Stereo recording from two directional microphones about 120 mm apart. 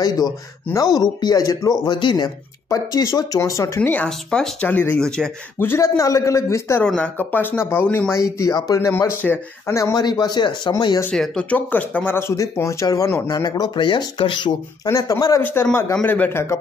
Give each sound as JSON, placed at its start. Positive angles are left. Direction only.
{"t": 0.0, "sound": "speech", "side_deg": 30}
{"t": 5.6, "sound": "speech", "side_deg": 20}
{"t": 6.8, "sound": "speech", "side_deg": 10}
{"t": 11.1, "sound": "speech", "side_deg": 10}
{"t": 14.9, "sound": "speech", "side_deg": 30}
{"t": 15.4, "sound": "speech", "side_deg": 15}